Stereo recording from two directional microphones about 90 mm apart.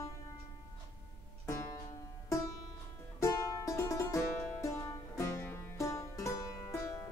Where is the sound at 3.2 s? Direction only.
35° left (ahead or behind).